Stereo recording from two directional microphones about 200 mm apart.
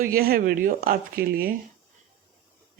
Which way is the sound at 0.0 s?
50° right (ahead or behind).